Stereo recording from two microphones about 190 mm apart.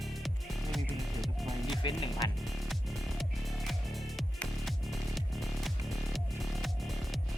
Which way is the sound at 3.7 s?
Centre (ahead or behind).